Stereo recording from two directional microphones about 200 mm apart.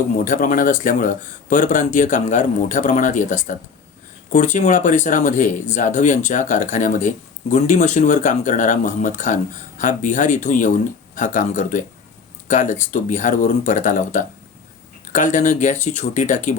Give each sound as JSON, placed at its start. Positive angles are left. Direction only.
{"t": 0.3, "sound": "speech", "side_deg": 45}